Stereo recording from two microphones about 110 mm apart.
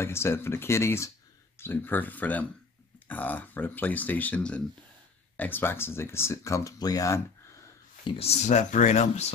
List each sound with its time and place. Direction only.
0.0 s speech: 25° left (ahead or behind)
8.0 s speech: 70° left (ahead or behind); by 9.3 s 85° left